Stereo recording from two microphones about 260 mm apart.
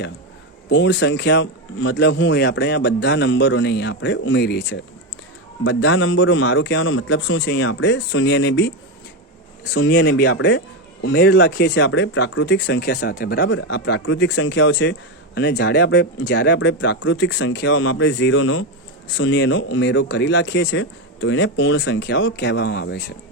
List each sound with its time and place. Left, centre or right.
0.7 s speech: left
9.7 s speech: left